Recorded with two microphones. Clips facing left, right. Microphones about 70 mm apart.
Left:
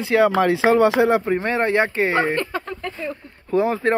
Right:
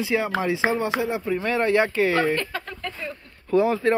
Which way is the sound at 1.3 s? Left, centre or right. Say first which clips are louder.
Left 2 dB; left.